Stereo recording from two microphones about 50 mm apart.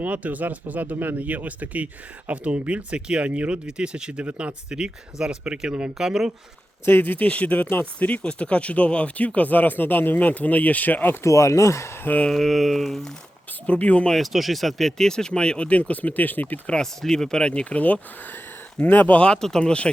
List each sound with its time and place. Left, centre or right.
0.0 s speech: right
4.7 s speech: centre
6.8 s speech: left
11.2 s speech: left
12.3 s a sound: centre
13.7 s speech: left
14.1 s speech: centre; by 16.6 s left
16.8 s speech: centre; by 18.0 s left
18.8 s speech: left
19.4 s speech: centre